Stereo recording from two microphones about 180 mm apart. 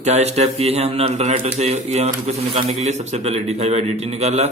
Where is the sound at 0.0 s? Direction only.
40° right (ahead or behind).